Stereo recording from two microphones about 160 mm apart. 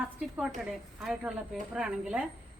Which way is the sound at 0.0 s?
5° right (ahead or behind).